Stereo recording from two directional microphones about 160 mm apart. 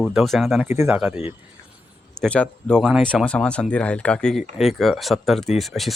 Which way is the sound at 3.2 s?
5° left (ahead or behind).